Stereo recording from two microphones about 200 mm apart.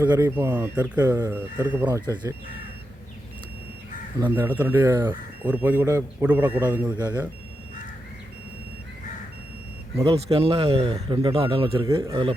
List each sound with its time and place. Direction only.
0.1 s a man's voice: 15° right (ahead or behind)
2.0 s speech: 20° right (ahead or behind)
4.4 s a man's voice: 10° right (ahead or behind)
9.9 s speech: 30° right (ahead or behind)
11.7 s a man's voice: 15° right (ahead or behind)
12.1 s speech: 25° right (ahead or behind)